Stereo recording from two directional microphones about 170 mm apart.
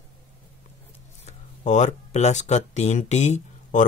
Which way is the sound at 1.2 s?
45° left (ahead or behind).